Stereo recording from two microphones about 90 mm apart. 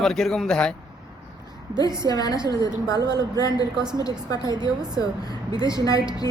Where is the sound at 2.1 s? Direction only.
45° left (ahead or behind).